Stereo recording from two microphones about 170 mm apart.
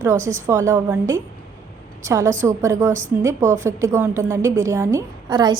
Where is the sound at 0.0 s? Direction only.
15° right (ahead or behind).